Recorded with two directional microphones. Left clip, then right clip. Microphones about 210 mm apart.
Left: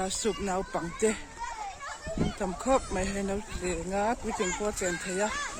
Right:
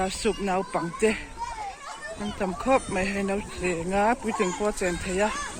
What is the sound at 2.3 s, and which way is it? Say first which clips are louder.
Speech: right 4 dB; 15° left (ahead or behind).